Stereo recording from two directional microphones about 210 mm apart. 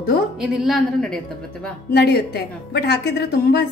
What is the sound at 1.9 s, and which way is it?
A woman's voice, 50° left (ahead or behind).